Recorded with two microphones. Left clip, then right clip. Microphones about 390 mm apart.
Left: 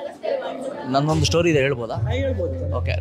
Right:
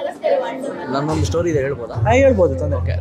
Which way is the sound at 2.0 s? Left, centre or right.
Right.